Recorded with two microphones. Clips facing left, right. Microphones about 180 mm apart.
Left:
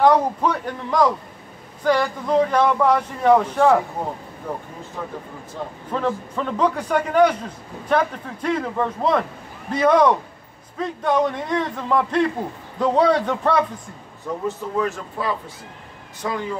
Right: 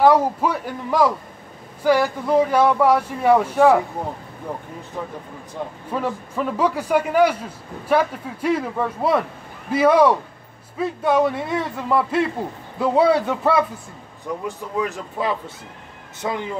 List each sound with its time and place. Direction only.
0.0 s speech: 5° right (ahead or behind)
5.9 s a man's voice: 10° right (ahead or behind)
14.8 s speech: 20° right (ahead or behind)